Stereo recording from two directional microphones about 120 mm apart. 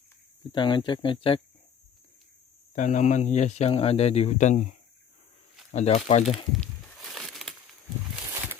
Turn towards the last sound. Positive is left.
turn(degrees=0)  # may be behind; listen again after turning